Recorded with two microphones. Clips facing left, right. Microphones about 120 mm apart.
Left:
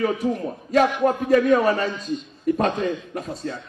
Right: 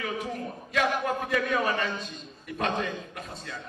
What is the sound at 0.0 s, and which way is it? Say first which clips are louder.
A man's voice: left 10 dB; 40° left (ahead or behind).